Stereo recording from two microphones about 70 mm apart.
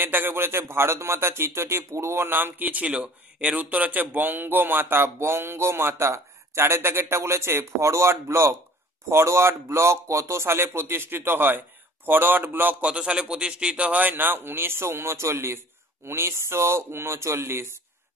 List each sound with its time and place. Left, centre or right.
0.0 s speech: right
12.8 s speech: centre; by 17.7 s right